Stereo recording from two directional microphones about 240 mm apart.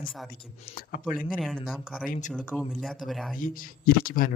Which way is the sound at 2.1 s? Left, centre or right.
Left.